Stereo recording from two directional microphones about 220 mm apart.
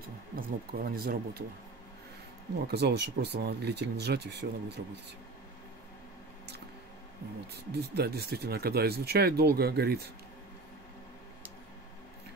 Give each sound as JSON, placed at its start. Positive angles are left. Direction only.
{"t": 0.4, "sound": "speech", "side_deg": -45}
{"t": 2.6, "sound": "speech", "side_deg": -50}
{"t": 7.5, "sound": "speech", "side_deg": -45}